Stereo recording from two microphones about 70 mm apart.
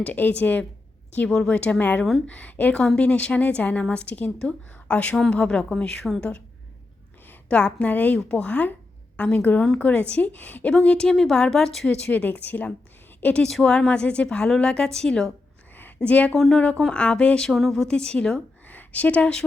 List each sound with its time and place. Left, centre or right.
0.0 s a woman's voice: left
1.3 s a woman's voice: centre
7.4 s a woman's voice: centre
10.8 s a woman's voice: centre
12.0 s a woman's voice: left
13.4 s a woman's voice: centre
16.0 s a woman's voice: left
16.3 s speech: centre
16.6 s a woman's voice: centre
17.5 s speech: centre
17.8 s a woman's voice: centre
18.7 s speech: left